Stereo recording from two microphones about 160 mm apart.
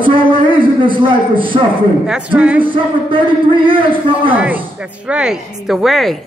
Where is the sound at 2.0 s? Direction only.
5° right (ahead or behind).